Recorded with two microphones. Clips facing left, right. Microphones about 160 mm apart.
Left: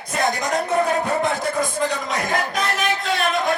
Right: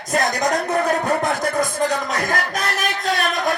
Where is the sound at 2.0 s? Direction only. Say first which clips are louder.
Even; 45° right (ahead or behind).